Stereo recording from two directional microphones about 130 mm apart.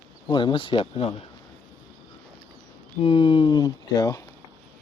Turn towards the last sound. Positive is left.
turn(degrees=30)  # may be behind; listen again after turning